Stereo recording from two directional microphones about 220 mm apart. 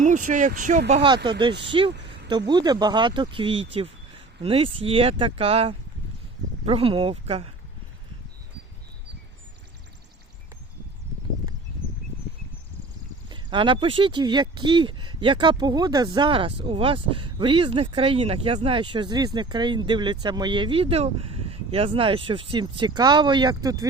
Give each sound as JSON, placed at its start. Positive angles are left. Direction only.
{"t": 0.0, "sound": "speech", "side_deg": -35}
{"t": 0.9, "sound": "speech", "side_deg": -25}
{"t": 1.9, "sound": "a sound", "side_deg": -50}
{"t": 2.5, "sound": "speech", "side_deg": -20}
{"t": 13.2, "sound": "speech", "side_deg": -20}